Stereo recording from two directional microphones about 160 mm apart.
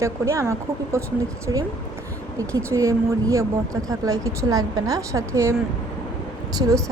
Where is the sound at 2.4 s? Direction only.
20° right (ahead or behind).